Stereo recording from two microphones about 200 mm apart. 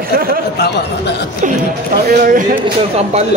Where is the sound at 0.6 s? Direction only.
55° left (ahead or behind).